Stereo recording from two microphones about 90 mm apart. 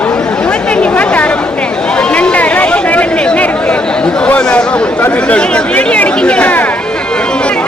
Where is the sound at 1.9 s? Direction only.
10° left (ahead or behind).